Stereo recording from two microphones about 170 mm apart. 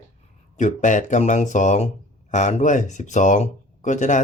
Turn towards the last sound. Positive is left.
turn(degrees=45)  # may be behind; listen again after turning